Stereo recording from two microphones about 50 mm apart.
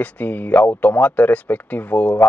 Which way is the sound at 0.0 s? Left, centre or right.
Left.